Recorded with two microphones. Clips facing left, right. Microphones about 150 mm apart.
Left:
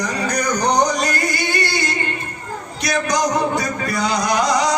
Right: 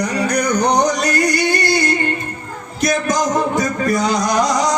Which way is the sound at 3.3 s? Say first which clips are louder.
Right 2 dB; 45° right (ahead or behind).